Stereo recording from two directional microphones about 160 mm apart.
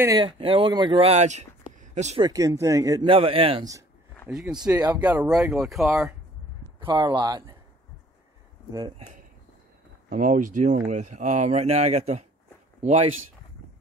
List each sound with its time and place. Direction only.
0.2 s speech: 35° right (ahead or behind)
1.8 s a sound: 45° right (ahead or behind)
2.2 s speech: 20° right (ahead or behind)
3.1 s speech: 35° right (ahead or behind)
4.3 s speech: 5° right (ahead or behind)
4.6 s speech: 20° right (ahead or behind)
4.9 s speech: 10° right (ahead or behind)
6.8 s speech: 25° right (ahead or behind)
8.7 s speech: 30° right (ahead or behind)
10.0 s speech: 55° right (ahead or behind)